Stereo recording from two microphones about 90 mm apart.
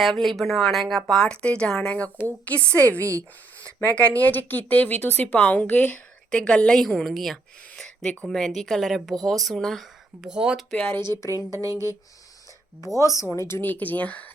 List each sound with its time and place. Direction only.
0.0 s speech: centre (ahead or behind)
3.0 s speech: 35° right (ahead or behind)
3.8 s speech: 15° left (ahead or behind)
7.8 s a sound: 10° left (ahead or behind)
8.3 s speech: centre (ahead or behind)
10.2 s speech: 10° right (ahead or behind)
11.6 s speech: 40° right (ahead or behind)
12.8 s speech: 35° left (ahead or behind); by 14.3 s 15° left (ahead or behind)